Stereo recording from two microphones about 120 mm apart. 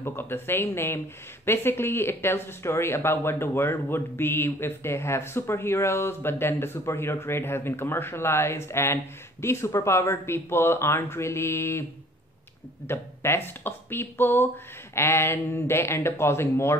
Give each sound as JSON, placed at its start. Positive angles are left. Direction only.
{"t": 0.0, "sound": "speech", "side_deg": 20}
{"t": 12.8, "sound": "speech", "side_deg": 20}